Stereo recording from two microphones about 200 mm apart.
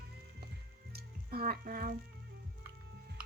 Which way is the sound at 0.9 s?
50° right (ahead or behind).